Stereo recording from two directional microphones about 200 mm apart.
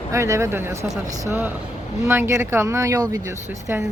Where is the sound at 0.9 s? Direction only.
35° right (ahead or behind).